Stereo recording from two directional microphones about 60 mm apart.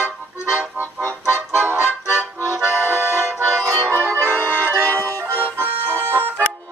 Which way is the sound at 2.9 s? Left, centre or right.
Right.